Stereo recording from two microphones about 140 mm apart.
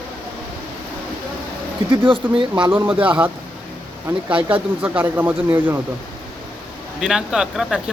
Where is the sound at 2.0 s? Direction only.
40° right (ahead or behind).